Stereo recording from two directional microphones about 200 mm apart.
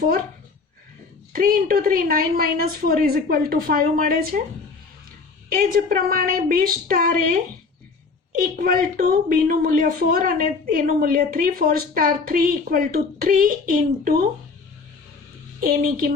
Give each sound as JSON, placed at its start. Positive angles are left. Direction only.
{"t": 1.3, "sound": "speech", "side_deg": -45}
{"t": 5.5, "sound": "speech", "side_deg": -45}
{"t": 8.4, "sound": "speech", "side_deg": -45}